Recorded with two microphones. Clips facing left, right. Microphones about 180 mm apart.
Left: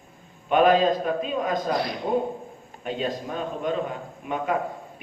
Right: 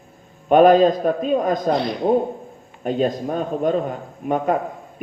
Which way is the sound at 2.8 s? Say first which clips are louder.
Right 8 dB; 45° right (ahead or behind).